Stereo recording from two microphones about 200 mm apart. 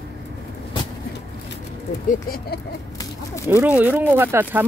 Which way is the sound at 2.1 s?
50° left (ahead or behind).